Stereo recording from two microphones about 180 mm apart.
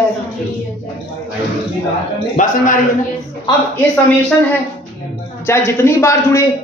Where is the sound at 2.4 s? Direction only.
45° left (ahead or behind).